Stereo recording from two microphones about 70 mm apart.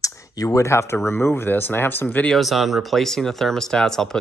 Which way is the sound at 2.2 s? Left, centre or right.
Centre.